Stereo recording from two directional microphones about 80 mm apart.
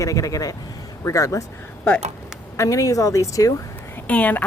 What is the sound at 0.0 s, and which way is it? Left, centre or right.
Speech, left.